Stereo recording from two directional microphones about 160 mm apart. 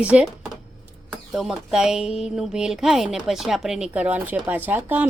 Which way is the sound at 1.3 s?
5° right (ahead or behind).